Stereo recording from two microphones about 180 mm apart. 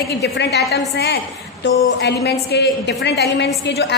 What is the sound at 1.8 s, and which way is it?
A woman's voice, 75° left (ahead or behind).